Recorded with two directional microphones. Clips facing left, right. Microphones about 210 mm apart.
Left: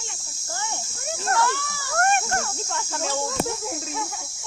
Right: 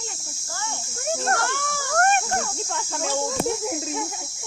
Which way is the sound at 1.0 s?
50° right (ahead or behind).